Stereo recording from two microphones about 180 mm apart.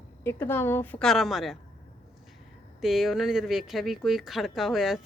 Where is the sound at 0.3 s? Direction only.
15° left (ahead or behind).